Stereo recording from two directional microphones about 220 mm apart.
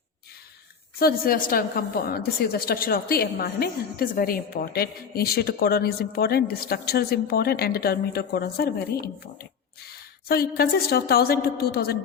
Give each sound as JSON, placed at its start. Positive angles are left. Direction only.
{"t": 0.9, "sound": "a woman's voice", "side_deg": 45}